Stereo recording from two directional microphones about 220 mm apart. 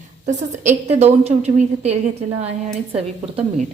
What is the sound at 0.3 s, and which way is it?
A woman's voice, 30° right (ahead or behind).